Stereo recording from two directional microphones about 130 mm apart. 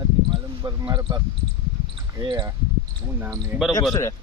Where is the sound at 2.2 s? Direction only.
35° right (ahead or behind).